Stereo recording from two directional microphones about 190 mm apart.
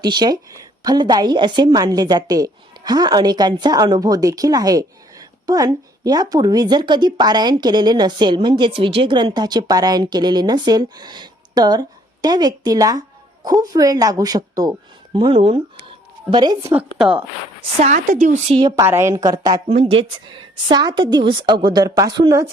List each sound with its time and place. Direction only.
0.0 s a woman's voice: 25° right (ahead or behind)
15.9 s a sound: 25° right (ahead or behind)
16.7 s a woman's voice: 5° right (ahead or behind)
17.7 s a woman's voice: 40° right (ahead or behind)
18.8 s a woman's voice: 15° right (ahead or behind)
19.6 s a woman's voice: 35° right (ahead or behind)